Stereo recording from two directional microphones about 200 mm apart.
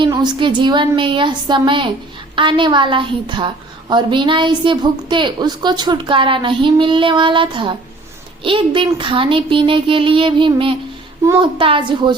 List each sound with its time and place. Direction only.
0.0 s a woman's voice: 20° right (ahead or behind)